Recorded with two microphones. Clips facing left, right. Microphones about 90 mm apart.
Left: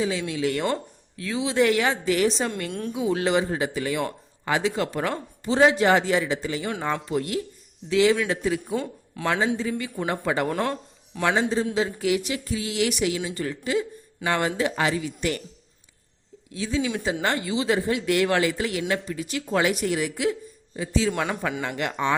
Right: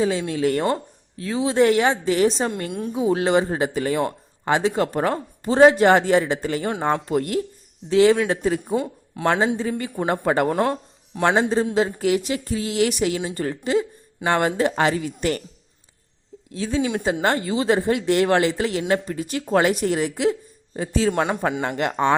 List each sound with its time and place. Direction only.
0.0 s speech: 40° right (ahead or behind)
2.6 s a woman's voice: 15° right (ahead or behind)
2.9 s speech: 35° right (ahead or behind)
8.6 s speech: 25° right (ahead or behind)
9.2 s speech: 40° right (ahead or behind)
10.5 s speech: 30° right (ahead or behind)
11.2 s speech: 40° right (ahead or behind)
16.5 s speech: 40° right (ahead or behind)
20.7 s speech: 45° right (ahead or behind)